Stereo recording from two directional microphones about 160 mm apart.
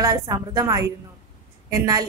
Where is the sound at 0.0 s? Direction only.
20° right (ahead or behind).